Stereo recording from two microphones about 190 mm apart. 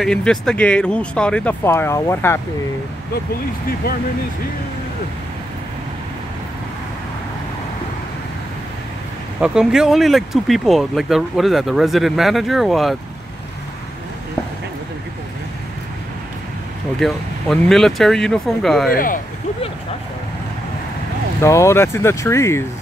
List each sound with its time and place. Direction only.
0.0 s speech: 5° left (ahead or behind)
9.4 s speech: 5° right (ahead or behind)
17.0 s speech: centre (ahead or behind)
18.9 s speech: 45° left (ahead or behind)
21.4 s speech: 15° left (ahead or behind)